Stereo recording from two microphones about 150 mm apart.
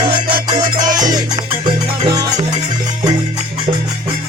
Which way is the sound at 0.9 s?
25° right (ahead or behind).